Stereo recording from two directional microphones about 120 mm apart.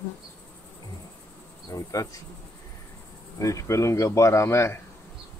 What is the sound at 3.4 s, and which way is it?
Speech, 25° left (ahead or behind).